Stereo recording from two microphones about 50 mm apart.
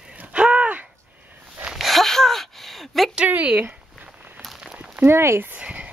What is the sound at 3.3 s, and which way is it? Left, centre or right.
Speech, right.